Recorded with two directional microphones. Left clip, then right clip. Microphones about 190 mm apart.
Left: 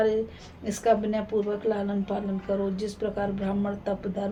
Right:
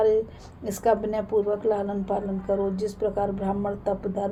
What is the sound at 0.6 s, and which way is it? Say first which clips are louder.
Speech: right 1 dB; 50° right (ahead or behind).